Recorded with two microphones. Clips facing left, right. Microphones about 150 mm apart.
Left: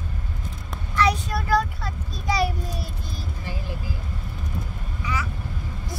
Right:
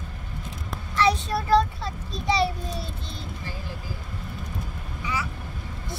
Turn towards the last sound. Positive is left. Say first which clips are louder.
# left 1 dB
turn(degrees=-30)  # may be behind; listen again after turning